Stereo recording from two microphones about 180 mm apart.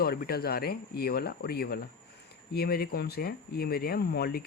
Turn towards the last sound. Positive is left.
turn(degrees=60)  # may be behind; listen again after turning